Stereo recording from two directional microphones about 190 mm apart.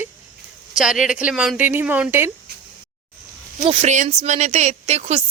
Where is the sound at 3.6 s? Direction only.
35° right (ahead or behind).